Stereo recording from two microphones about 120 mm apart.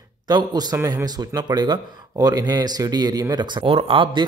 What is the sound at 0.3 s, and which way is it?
A man's voice, 35° right (ahead or behind).